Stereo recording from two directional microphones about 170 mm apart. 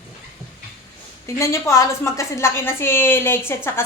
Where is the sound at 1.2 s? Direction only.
15° left (ahead or behind).